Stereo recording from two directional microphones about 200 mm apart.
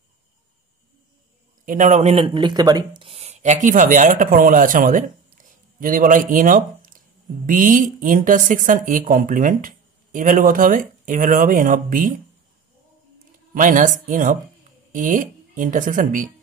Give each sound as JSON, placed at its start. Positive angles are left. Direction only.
{"t": 1.7, "sound": "a woman's voice", "side_deg": -40}
{"t": 13.6, "sound": "a woman's voice", "side_deg": -40}